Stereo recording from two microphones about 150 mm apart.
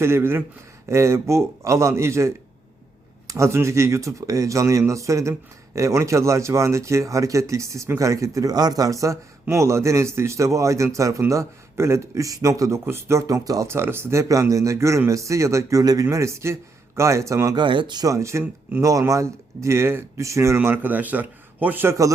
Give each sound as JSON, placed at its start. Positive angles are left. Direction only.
{"t": 0.0, "sound": "a man's voice", "side_deg": -15}